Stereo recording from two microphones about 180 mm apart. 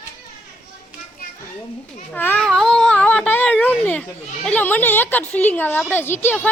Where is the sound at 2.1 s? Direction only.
10° left (ahead or behind).